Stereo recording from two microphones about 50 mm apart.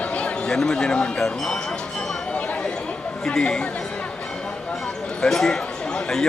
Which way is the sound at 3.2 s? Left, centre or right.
Centre.